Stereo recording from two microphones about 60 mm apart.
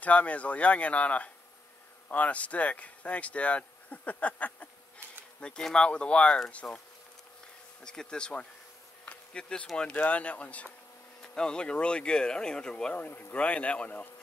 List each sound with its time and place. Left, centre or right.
0.0 s speech: left
6.6 s speech: left
7.8 s speech: centre
9.0 s insect: centre
9.9 s speech: left
12.9 s speech: left
13.4 s speech: left